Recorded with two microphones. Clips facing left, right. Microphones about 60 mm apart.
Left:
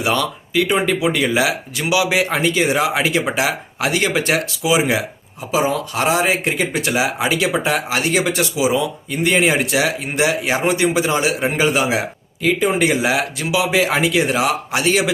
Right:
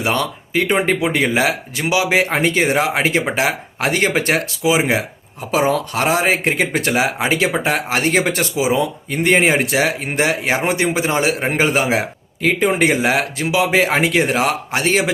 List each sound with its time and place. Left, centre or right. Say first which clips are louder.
0.0 s speech: even; right
5.5 s speech: right 2 dB; right